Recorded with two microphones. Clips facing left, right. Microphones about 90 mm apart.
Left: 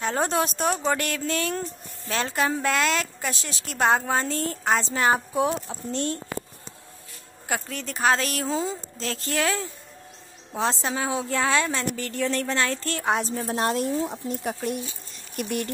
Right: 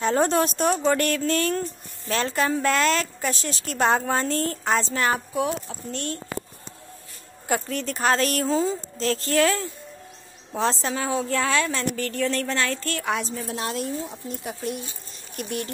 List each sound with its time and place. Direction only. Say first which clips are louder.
0.0 s a woman's voice: right 3 dB; 5° left (ahead or behind)
5.3 s speech: left 1 dB; 30° left (ahead or behind)
7.4 s a woman's voice: right 4 dB; centre (ahead or behind); by 13.3 s 30° left (ahead or behind)
13.3 s speech: left 4 dB; 45° left (ahead or behind)